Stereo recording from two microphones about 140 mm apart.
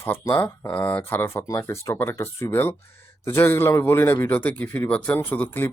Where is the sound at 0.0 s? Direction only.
15° left (ahead or behind).